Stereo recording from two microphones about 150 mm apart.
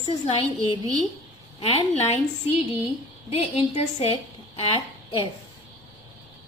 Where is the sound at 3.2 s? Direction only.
40° left (ahead or behind).